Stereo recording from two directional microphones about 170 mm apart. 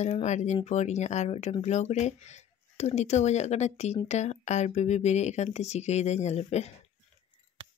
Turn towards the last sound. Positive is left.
turn(degrees=40)  # may be behind; listen again after turning